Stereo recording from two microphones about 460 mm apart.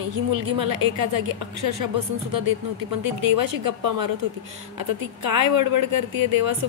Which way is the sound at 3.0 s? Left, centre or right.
Right.